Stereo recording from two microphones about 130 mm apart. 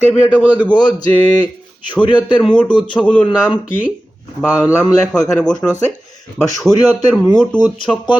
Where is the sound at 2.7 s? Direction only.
35° left (ahead or behind).